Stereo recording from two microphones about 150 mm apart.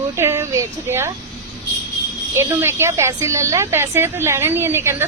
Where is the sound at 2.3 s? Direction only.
15° right (ahead or behind).